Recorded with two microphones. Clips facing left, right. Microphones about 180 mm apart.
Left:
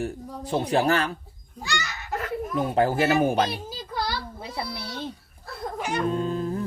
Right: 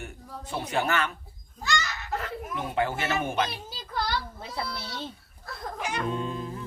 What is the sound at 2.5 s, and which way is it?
Speech, 40° left (ahead or behind).